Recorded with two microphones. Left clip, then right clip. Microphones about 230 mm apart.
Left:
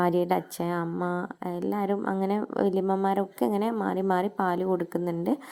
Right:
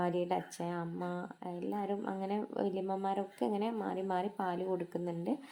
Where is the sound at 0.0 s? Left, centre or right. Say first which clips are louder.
Left 9 dB; left.